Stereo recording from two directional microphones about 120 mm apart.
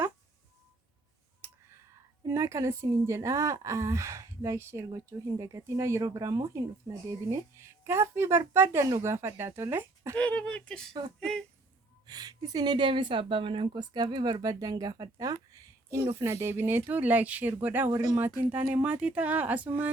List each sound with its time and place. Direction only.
1.4 s clicking: 20° right (ahead or behind)
2.2 s speech: 25° right (ahead or behind)
10.2 s speech: 10° left (ahead or behind)
12.0 s a woman's voice: 35° right (ahead or behind); by 19.9 s 15° right (ahead or behind)